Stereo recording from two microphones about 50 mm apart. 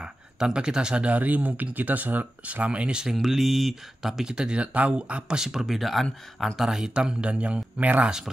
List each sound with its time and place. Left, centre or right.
0.0 s speech: centre
5.4 s speech: centre
6.9 s speech: centre